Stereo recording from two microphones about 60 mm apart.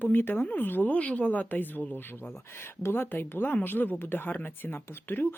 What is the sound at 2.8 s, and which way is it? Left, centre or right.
Speech, left.